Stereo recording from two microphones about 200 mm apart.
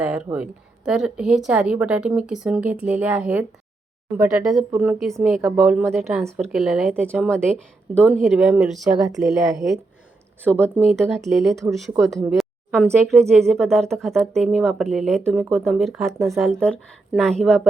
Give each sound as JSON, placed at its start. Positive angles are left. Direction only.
{"t": 0.0, "sound": "speech", "side_deg": -5}